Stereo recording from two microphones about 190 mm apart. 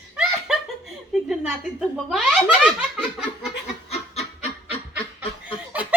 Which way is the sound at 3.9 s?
35° left (ahead or behind).